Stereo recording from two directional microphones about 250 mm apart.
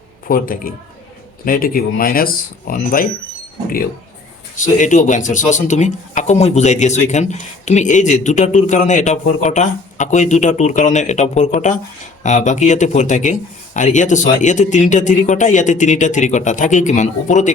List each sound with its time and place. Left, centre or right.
0.3 s speech: left
4.5 s speech: left